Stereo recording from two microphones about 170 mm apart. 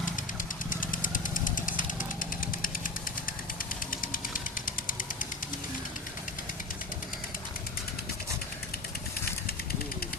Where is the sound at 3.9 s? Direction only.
55° left (ahead or behind).